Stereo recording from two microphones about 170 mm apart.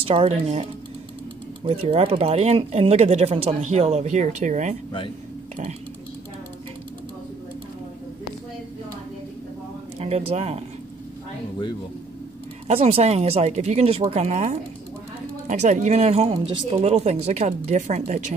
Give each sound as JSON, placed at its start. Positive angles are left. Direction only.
{"t": 0.0, "sound": "speech", "side_deg": -35}
{"t": 9.9, "sound": "speech", "side_deg": -35}
{"t": 12.6, "sound": "speech", "side_deg": -35}